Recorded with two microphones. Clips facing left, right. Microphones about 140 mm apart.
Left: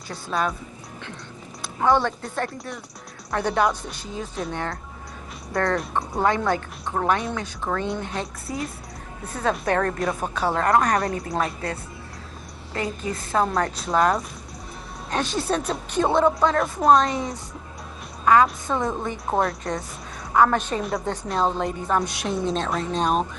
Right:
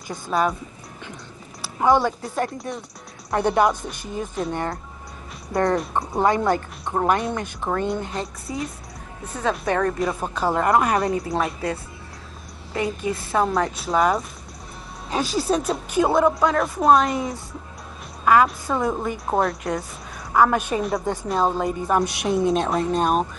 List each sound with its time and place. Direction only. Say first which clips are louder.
0.3 s a woman's voice: right 3 dB; 5° right (ahead or behind)
1.6 s speech: right 2 dB; 10° right (ahead or behind)
3.4 s a woman's voice: right 3 dB; centre (ahead or behind)
7.9 s a woman's voice: right 2 dB; centre (ahead or behind)